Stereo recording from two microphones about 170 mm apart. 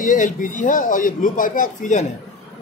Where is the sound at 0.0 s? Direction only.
50° left (ahead or behind).